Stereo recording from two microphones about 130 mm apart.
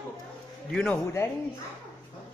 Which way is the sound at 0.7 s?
15° left (ahead or behind).